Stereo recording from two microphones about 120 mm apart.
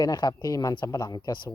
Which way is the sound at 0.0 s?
35° left (ahead or behind).